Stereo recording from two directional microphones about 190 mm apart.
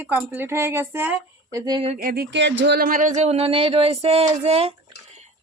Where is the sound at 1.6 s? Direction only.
25° right (ahead or behind).